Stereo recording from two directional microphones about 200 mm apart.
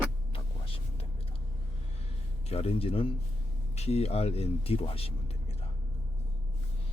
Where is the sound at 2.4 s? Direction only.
30° left (ahead or behind).